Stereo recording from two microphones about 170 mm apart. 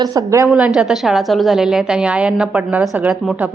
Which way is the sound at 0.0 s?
20° right (ahead or behind).